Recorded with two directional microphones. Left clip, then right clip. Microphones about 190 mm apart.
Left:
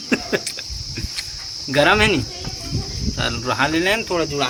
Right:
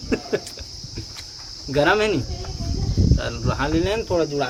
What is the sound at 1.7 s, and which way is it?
Cricket, 25° left (ahead or behind).